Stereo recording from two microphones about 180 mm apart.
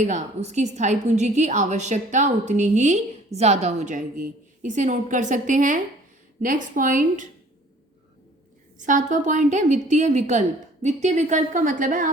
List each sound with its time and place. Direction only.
0.0 s a woman's voice: 40° right (ahead or behind)
8.8 s a woman's voice: 45° right (ahead or behind)